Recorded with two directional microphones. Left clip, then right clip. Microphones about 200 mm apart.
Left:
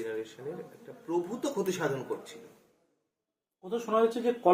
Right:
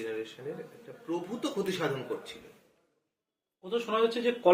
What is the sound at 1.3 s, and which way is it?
Speech, 10° left (ahead or behind).